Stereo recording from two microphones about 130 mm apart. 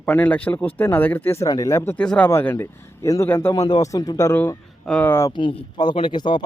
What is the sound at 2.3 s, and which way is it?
A man's voice, 20° left (ahead or behind).